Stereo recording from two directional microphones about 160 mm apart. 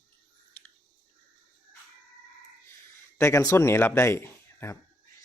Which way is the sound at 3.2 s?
15° left (ahead or behind).